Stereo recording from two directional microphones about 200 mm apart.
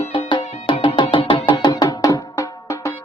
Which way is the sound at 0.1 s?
25° left (ahead or behind).